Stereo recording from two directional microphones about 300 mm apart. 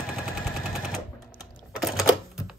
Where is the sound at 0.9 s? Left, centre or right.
Centre.